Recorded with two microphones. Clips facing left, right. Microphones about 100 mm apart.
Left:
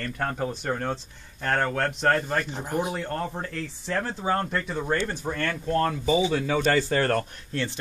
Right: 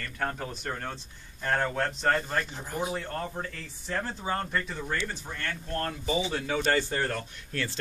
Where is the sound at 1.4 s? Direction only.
75° left (ahead or behind).